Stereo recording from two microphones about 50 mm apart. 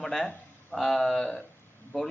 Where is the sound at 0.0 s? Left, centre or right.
Centre.